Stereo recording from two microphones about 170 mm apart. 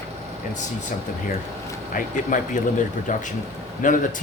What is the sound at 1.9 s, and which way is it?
Speech, 50° left (ahead or behind).